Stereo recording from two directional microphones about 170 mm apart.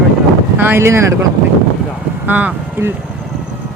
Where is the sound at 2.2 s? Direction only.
10° right (ahead or behind).